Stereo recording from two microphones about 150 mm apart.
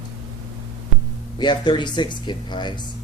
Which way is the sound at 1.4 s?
30° left (ahead or behind).